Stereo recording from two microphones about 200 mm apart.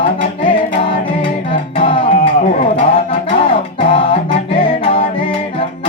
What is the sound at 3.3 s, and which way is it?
Music, 30° left (ahead or behind).